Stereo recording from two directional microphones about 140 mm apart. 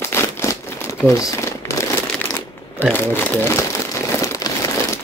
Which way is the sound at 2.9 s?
15° left (ahead or behind).